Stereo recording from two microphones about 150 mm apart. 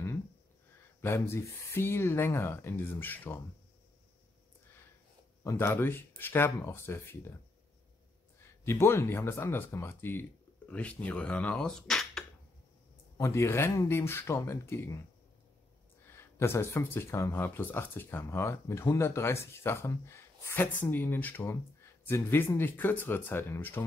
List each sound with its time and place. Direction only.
1.0 s speech: 15° left (ahead or behind)
5.4 s speech: 20° left (ahead or behind)
8.4 s speech: 15° left (ahead or behind)
13.2 s speech: 20° left (ahead or behind)
16.1 s speech: 15° left (ahead or behind)